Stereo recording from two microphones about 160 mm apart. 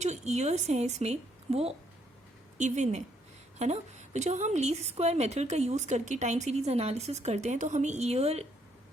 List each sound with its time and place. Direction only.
0.0 s a woman's voice: 45° right (ahead or behind)